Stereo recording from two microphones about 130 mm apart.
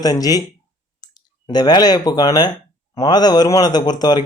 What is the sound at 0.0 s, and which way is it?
A man's voice, 30° left (ahead or behind).